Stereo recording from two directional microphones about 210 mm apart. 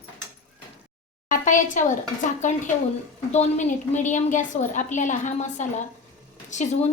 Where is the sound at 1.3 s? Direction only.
35° left (ahead or behind).